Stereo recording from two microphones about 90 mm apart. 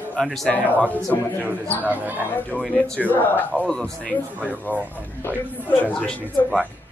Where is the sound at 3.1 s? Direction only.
20° left (ahead or behind).